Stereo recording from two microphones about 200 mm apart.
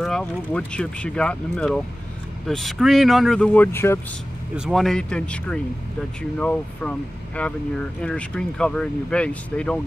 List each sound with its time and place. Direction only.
0.0 s speech: 5° left (ahead or behind)
4.6 s speech: centre (ahead or behind)